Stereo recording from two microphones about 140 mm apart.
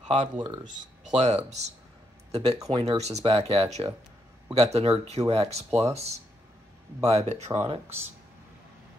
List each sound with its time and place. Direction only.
0.1 s speech: 55° right (ahead or behind)